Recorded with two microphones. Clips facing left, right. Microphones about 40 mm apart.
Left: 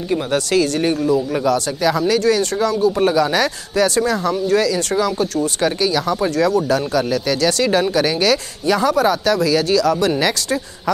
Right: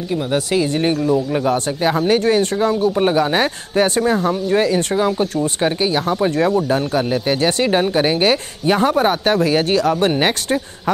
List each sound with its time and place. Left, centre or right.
0.3 s speech: centre
1.4 s speech: right